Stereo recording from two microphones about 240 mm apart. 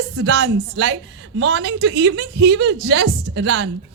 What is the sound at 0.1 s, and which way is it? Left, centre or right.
A woman's voice, right.